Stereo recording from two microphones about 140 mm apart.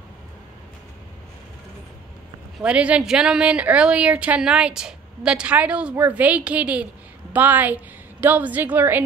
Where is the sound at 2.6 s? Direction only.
10° right (ahead or behind).